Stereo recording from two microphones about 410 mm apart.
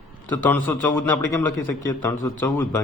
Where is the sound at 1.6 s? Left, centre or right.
Left.